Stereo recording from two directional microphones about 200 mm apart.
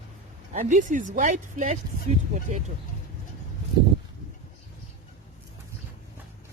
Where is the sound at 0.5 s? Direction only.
40° right (ahead or behind).